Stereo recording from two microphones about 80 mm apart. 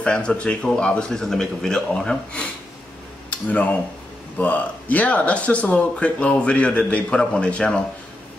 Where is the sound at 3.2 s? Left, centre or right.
Centre.